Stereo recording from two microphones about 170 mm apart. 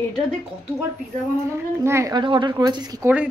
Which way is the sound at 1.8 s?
15° right (ahead or behind).